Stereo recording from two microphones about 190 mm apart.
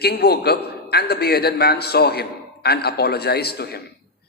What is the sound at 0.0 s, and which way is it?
A man's voice, 55° left (ahead or behind).